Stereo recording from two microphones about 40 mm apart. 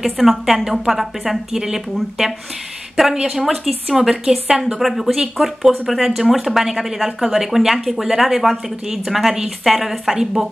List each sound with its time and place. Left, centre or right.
0.0 s speech: centre
4.5 s speech: centre
4.7 s speech: centre